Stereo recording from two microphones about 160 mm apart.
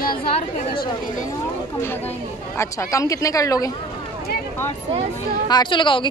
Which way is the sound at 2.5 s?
20° left (ahead or behind).